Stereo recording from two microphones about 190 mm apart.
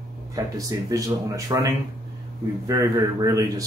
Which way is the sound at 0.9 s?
20° right (ahead or behind).